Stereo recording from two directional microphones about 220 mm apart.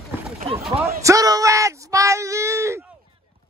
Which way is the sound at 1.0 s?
15° right (ahead or behind).